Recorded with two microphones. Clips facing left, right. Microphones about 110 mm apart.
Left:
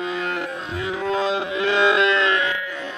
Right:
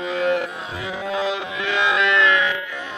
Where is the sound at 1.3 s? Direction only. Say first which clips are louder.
Left 4 dB; 35° left (ahead or behind).